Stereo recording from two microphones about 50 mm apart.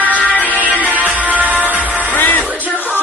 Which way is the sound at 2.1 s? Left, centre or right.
Left.